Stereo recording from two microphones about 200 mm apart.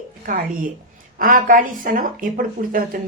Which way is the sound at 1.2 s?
45° right (ahead or behind).